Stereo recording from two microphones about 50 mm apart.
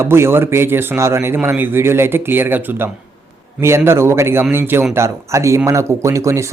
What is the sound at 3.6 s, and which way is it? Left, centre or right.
Speech, right.